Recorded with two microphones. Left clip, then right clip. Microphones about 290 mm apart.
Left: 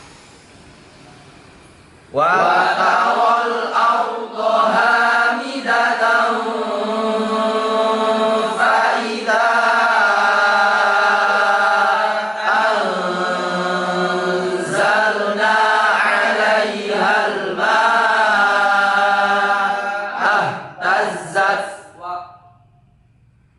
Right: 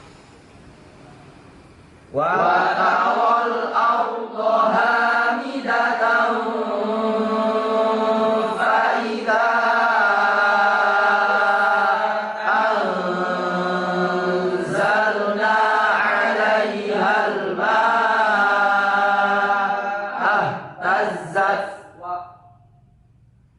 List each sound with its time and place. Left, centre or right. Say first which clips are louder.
2.1 s chant: left 4 dB; centre
7.9 s chant: left 2 dB; centre